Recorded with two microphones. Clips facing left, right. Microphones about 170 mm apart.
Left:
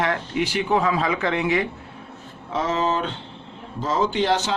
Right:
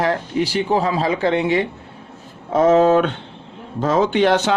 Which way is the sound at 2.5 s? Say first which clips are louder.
Right 10 dB; 50° right (ahead or behind).